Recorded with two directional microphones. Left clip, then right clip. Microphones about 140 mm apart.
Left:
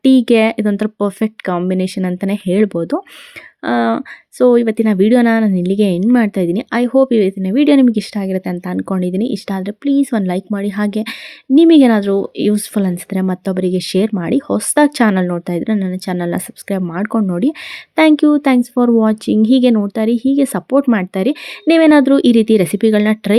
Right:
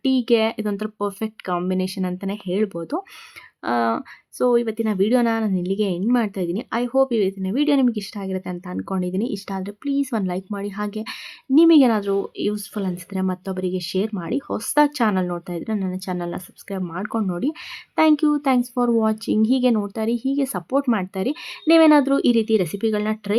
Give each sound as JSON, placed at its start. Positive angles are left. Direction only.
{"t": 0.0, "sound": "speech", "side_deg": 25}